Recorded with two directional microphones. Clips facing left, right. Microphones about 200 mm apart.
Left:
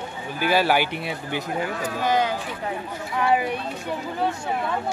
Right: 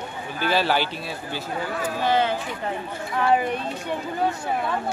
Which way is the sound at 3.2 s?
5° left (ahead or behind).